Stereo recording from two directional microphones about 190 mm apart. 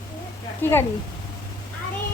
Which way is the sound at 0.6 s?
10° left (ahead or behind).